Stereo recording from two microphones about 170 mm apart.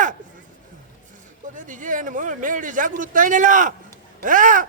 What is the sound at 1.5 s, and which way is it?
A man's voice, 50° right (ahead or behind).